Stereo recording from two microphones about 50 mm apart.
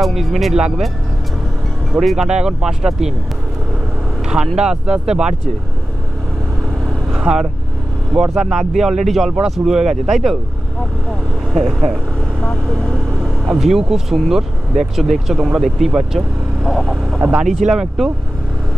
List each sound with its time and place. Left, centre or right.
0.0 s speech: centre
1.9 s speech: centre
2.2 s speech: centre
4.6 s speech: centre
7.1 s speech: centre
11.5 s speech: centre
13.2 s speech: centre
16.7 s speech: centre
17.2 s speech: centre